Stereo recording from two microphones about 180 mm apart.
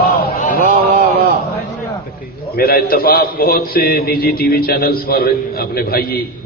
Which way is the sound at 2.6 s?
55° left (ahead or behind).